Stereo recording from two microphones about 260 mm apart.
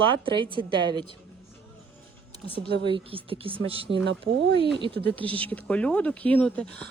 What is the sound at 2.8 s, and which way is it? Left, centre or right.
Speech, centre.